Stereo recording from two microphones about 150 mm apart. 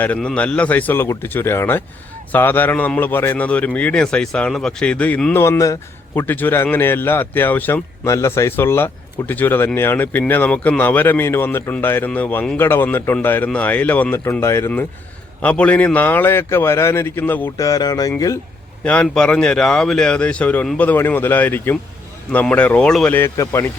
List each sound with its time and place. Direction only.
0.0 s a man's voice: 10° left (ahead or behind)
17.7 s speech: 25° left (ahead or behind)
18.9 s a man's voice: 5° left (ahead or behind)